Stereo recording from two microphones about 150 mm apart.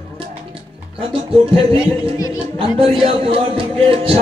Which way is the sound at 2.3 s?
35° right (ahead or behind).